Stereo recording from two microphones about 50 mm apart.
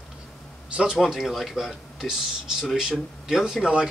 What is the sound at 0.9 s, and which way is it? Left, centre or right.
Speech, centre.